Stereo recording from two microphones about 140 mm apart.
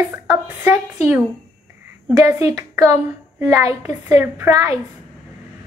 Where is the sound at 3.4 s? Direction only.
20° right (ahead or behind).